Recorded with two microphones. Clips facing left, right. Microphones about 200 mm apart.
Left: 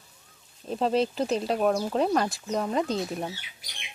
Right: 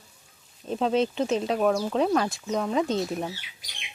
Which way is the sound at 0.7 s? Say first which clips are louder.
Right 1 dB; centre (ahead or behind).